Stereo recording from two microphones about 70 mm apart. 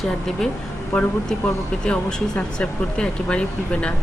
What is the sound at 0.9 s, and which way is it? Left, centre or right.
Speech, centre.